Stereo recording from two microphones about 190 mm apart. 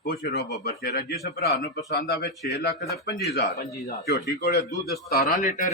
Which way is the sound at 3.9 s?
60° left (ahead or behind).